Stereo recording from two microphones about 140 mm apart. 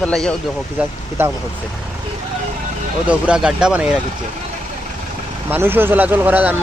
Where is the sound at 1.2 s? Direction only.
15° right (ahead or behind).